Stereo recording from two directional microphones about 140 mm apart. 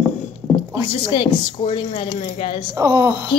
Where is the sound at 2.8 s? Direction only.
25° right (ahead or behind).